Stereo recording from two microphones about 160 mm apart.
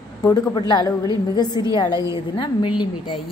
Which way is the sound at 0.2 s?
20° left (ahead or behind).